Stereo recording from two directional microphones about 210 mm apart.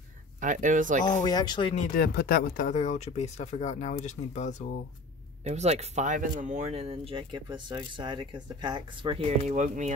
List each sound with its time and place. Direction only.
0.4 s speech: 35° right (ahead or behind)
1.2 s speech: 20° left (ahead or behind)
1.8 s speech: 45° left (ahead or behind)
5.4 s speech: 30° right (ahead or behind)